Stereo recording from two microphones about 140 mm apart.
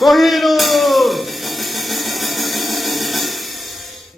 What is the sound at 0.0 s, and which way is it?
Music, centre (ahead or behind).